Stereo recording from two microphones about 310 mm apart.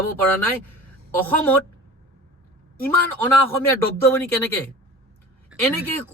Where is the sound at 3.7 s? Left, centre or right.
Centre.